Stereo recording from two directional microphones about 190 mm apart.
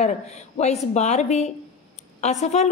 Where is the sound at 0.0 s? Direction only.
35° left (ahead or behind).